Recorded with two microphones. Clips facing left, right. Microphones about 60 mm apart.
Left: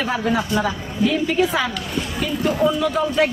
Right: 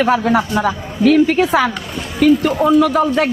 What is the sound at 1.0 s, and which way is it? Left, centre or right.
Speech, right.